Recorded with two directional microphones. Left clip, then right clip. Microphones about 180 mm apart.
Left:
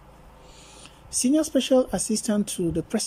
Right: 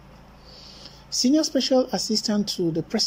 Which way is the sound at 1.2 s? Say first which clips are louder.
Right 1 dB; 15° left (ahead or behind).